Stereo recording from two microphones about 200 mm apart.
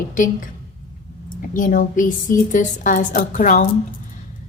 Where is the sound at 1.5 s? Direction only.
40° left (ahead or behind).